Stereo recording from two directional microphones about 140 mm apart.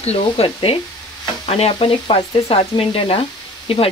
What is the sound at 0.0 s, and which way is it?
Speech, 45° left (ahead or behind).